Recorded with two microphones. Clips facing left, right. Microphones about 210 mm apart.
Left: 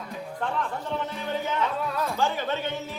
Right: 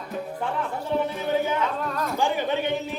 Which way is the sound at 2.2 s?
15° right (ahead or behind).